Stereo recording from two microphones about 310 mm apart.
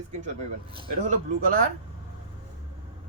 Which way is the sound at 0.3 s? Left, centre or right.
Right.